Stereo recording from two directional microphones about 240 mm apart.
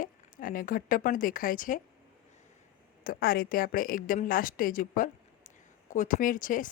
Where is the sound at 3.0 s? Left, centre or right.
Left.